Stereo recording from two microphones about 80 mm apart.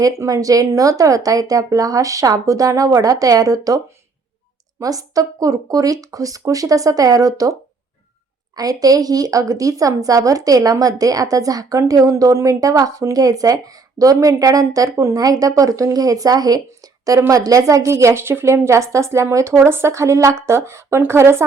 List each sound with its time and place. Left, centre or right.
0.0 s a woman's voice: right
4.8 s a woman's voice: right
8.5 s a woman's voice: right